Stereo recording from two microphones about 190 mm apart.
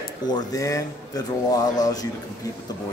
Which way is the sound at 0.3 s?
20° left (ahead or behind).